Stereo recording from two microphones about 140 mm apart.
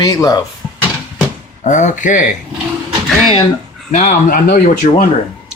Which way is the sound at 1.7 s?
60° left (ahead or behind).